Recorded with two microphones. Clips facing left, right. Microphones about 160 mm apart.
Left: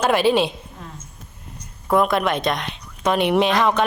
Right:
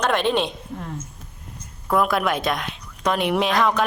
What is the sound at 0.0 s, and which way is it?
Speech, 5° left (ahead or behind).